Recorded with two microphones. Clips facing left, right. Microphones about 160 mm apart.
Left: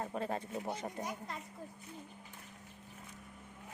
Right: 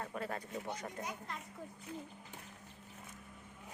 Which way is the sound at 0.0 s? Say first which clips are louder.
Left 3 dB; 25° left (ahead or behind).